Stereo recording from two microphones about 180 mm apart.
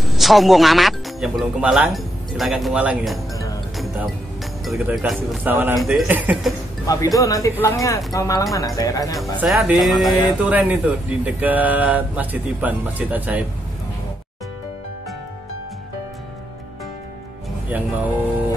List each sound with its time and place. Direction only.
0.0 s speech: centre (ahead or behind)
3.7 s music: centre (ahead or behind)
4.6 s a man's voice: centre (ahead or behind)
7.2 s speech: 20° left (ahead or behind)
9.4 s a man's voice: 5° right (ahead or behind)
17.6 s music: 10° right (ahead or behind)